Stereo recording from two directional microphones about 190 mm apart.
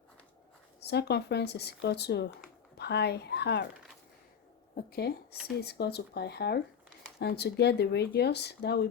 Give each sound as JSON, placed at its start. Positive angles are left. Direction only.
{"t": 0.8, "sound": "speech", "side_deg": 60}
{"t": 4.9, "sound": "speech", "side_deg": 55}